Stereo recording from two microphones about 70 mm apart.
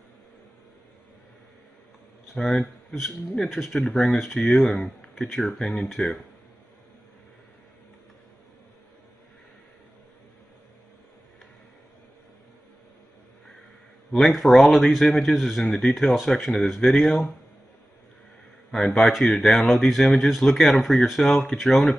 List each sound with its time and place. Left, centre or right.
2.3 s speech: centre
14.1 s speech: centre
18.7 s speech: centre
21.3 s speech: centre
21.5 s speech: centre